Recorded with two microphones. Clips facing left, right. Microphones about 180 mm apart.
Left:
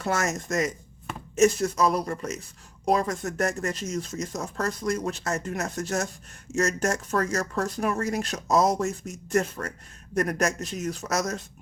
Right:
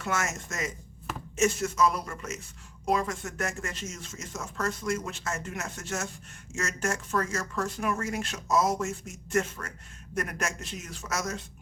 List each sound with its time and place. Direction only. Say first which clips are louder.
0.0 s speech: left 5 dB; 35° left (ahead or behind)